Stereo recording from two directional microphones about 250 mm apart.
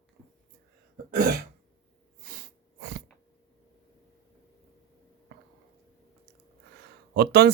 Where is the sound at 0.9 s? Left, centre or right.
Right.